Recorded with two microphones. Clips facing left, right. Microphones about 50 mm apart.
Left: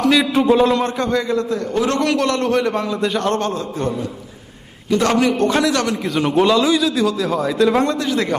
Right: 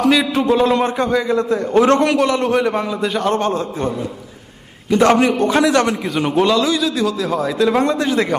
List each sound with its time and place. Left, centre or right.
0.0 s a man's voice: centre
0.7 s a man's voice: centre
1.4 s a man's voice: right
2.0 s a man's voice: centre
4.9 s a man's voice: right
5.3 s a man's voice: centre
5.6 s a man's voice: right
6.1 s a man's voice: centre
7.9 s a man's voice: right